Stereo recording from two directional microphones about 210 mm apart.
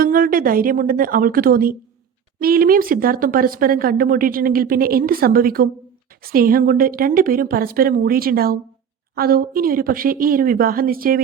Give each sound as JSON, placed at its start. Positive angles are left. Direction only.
{"t": 0.0, "sound": "speech", "side_deg": -45}